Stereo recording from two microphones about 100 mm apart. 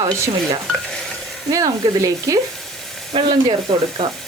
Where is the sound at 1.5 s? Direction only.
35° right (ahead or behind).